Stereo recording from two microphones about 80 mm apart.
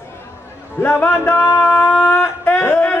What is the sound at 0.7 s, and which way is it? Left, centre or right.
Speech, left.